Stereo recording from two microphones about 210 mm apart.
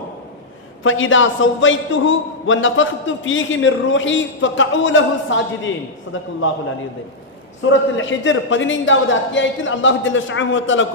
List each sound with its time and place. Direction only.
0.9 s a man's voice: 70° left (ahead or behind)
7.7 s a man's voice: 65° left (ahead or behind)